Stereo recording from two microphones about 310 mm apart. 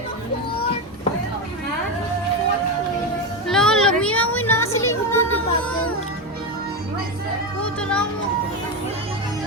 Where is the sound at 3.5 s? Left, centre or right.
Centre.